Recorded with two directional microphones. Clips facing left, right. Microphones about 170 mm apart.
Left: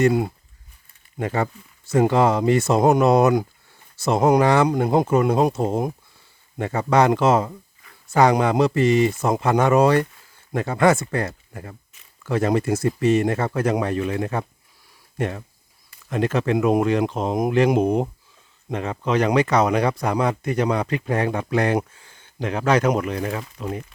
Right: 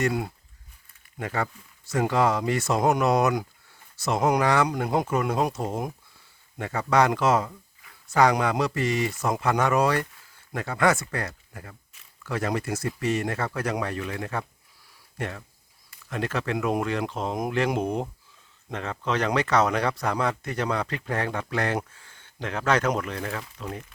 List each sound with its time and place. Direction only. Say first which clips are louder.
0.0 s speech: left 8 dB; 25° left (ahead or behind)